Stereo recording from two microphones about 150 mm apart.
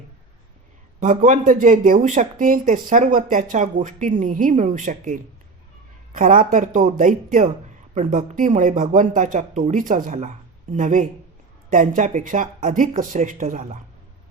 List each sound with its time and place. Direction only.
0.9 s speech: 60° right (ahead or behind)